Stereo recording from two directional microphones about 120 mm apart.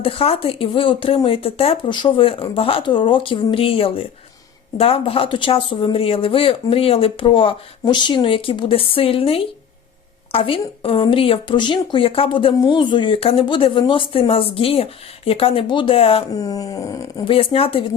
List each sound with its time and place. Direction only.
0.0 s speech: 50° left (ahead or behind)
16.3 s speech: 30° left (ahead or behind)
17.2 s speech: 50° left (ahead or behind)